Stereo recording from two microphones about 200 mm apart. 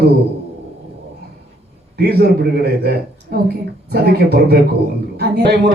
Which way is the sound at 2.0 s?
55° right (ahead or behind).